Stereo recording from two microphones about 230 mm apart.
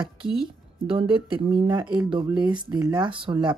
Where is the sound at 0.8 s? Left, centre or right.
Right.